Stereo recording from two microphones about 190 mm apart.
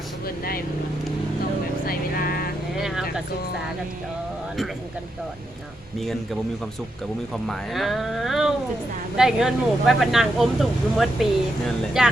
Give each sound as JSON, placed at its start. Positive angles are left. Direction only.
{"t": 0.3, "sound": "speech", "side_deg": 50}
{"t": 1.9, "sound": "vehicle", "side_deg": 50}
{"t": 2.7, "sound": "vehicle", "side_deg": 0}
{"t": 7.4, "sound": "speech", "side_deg": 0}